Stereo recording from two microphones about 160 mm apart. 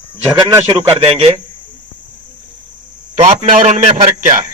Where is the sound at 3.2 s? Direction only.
50° right (ahead or behind).